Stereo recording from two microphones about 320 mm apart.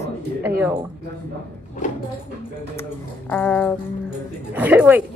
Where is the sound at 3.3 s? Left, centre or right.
Centre.